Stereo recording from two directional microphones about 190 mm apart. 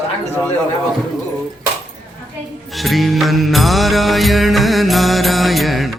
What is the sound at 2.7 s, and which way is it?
Music, centre (ahead or behind).